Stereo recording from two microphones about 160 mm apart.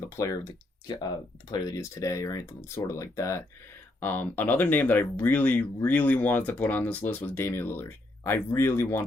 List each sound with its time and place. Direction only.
0.2 s speech: 20° left (ahead or behind)
1.5 s speech: 25° left (ahead or behind)